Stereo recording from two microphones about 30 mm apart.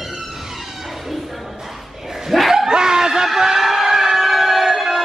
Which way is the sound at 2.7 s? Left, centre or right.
Right.